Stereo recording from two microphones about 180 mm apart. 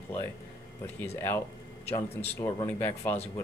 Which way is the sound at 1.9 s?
15° left (ahead or behind).